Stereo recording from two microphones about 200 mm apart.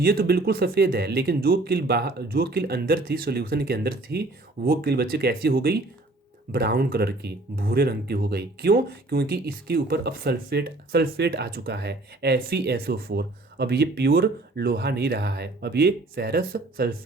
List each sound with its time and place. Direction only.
0.0 s speech: 50° right (ahead or behind)